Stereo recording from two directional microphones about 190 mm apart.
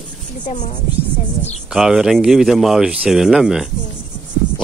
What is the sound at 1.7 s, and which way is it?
Speech, 5° right (ahead or behind).